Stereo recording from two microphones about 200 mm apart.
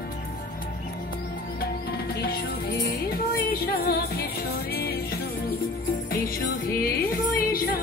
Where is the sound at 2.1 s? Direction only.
50° left (ahead or behind).